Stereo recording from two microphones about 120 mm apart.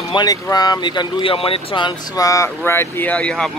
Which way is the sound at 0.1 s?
35° left (ahead or behind).